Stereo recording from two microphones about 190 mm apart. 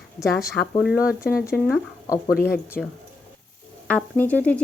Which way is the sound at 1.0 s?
50° left (ahead or behind).